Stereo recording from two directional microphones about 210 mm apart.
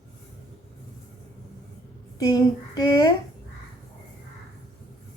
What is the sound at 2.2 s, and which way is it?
Speech, 20° left (ahead or behind).